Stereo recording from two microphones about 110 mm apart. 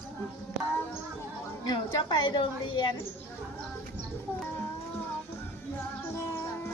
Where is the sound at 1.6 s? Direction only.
45° left (ahead or behind).